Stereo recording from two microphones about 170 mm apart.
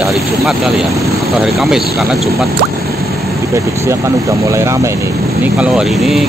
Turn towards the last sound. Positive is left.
turn(degrees=0)  # may be behind; listen again after turning